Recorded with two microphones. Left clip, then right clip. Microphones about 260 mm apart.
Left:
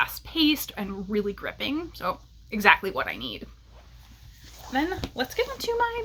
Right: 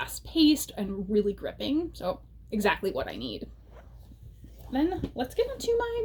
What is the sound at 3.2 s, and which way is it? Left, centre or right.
Speech, left.